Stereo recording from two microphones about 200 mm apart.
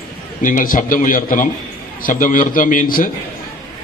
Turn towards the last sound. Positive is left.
turn(degrees=45)  # may be behind; listen again after turning